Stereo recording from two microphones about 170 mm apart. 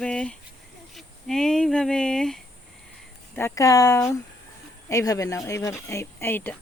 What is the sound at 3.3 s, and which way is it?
Speech, 15° left (ahead or behind).